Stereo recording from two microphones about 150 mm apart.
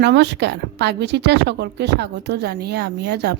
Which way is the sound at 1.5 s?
90° right.